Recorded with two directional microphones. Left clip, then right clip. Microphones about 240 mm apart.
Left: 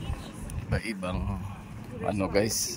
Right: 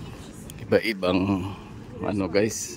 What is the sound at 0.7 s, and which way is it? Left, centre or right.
A man's voice, right.